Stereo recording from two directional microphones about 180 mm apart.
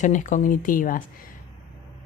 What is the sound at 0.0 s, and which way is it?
Speech, 45° left (ahead or behind).